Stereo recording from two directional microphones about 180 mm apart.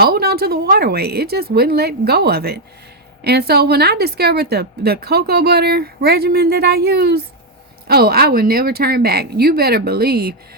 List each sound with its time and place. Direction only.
0.0 s a woman's voice: 60° right (ahead or behind)